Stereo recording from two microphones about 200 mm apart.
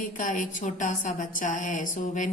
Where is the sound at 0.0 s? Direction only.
40° left (ahead or behind).